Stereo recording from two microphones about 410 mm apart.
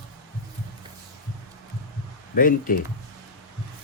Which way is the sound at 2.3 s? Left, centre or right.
Centre.